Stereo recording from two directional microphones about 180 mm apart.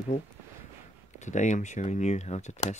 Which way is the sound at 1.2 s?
40° left (ahead or behind).